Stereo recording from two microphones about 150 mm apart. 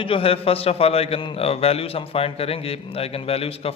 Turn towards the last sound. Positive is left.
turn(degrees=40)  # may be behind; listen again after turning